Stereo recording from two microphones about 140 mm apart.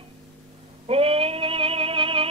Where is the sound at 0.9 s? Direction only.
45° right (ahead or behind).